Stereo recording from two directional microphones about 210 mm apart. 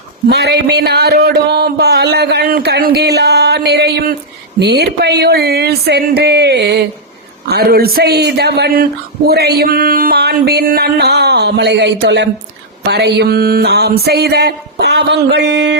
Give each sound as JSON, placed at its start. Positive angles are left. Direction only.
{"t": 0.3, "sound": "speech", "side_deg": -50}